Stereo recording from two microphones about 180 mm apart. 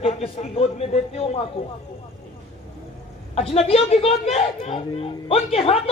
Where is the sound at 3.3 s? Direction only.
30° left (ahead or behind).